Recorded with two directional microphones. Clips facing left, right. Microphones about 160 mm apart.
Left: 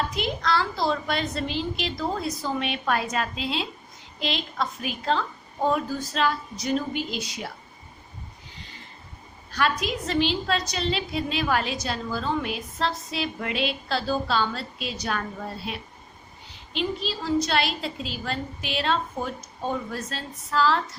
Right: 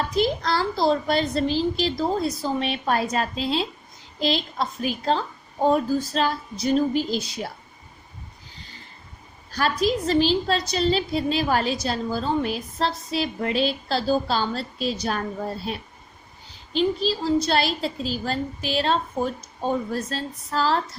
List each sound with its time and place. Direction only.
0.2 s a woman's voice: 35° right (ahead or behind)
9.5 s a woman's voice: 35° right (ahead or behind)